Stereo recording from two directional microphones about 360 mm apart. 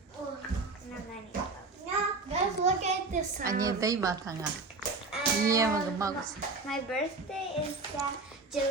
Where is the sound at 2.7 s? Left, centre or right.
Centre.